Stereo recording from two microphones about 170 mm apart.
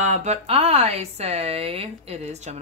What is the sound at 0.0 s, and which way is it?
Speech, 45° right (ahead or behind).